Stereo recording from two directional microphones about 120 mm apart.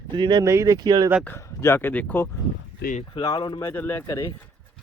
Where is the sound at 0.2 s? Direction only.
40° right (ahead or behind).